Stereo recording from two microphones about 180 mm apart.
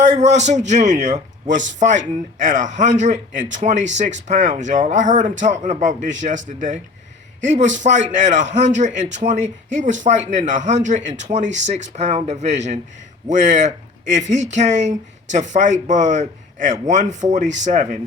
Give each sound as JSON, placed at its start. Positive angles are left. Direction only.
{"t": 0.0, "sound": "a man's voice", "side_deg": -40}